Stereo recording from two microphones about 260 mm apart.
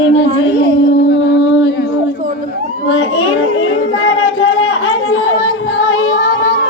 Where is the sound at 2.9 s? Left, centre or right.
Left.